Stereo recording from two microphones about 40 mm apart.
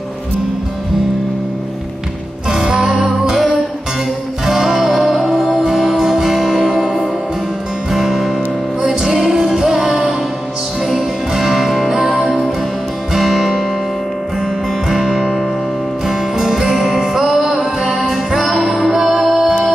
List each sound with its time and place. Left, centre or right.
2.5 s music: centre
4.5 s music: centre
14.9 s music: centre
17.8 s music: centre